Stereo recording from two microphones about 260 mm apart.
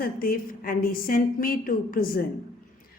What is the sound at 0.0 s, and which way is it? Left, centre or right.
Speech, left.